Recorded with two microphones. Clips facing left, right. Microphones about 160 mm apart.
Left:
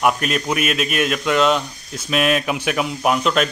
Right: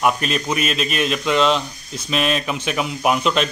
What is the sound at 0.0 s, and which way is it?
A man's voice, 5° left (ahead or behind).